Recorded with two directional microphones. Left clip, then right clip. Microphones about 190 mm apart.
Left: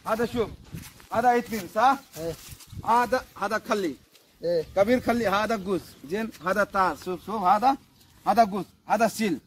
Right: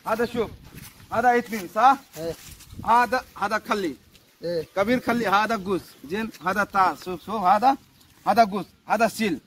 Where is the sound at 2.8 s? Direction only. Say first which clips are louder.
Right 3 dB; 5° left (ahead or behind).